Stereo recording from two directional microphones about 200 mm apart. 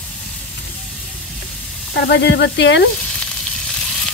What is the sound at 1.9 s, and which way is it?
Speech, 55° left (ahead or behind).